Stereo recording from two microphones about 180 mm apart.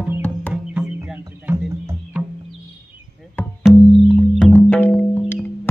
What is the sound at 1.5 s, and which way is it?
Music, 15° right (ahead or behind).